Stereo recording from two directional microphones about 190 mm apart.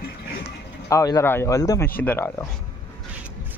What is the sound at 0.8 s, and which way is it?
A man's voice, 15° left (ahead or behind).